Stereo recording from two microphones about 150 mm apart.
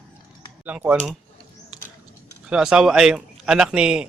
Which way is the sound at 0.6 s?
10° right (ahead or behind).